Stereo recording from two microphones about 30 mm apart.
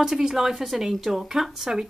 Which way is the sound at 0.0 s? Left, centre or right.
Centre.